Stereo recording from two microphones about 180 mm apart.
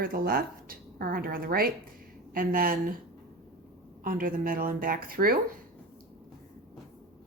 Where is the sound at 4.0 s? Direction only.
50° right (ahead or behind).